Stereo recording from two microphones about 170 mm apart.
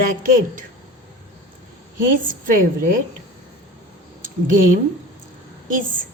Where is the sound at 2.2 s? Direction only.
55° right (ahead or behind).